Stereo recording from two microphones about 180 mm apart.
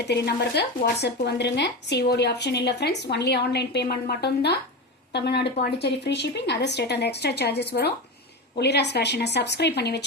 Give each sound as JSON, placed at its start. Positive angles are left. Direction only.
{"t": 0.6, "sound": "speech", "side_deg": 65}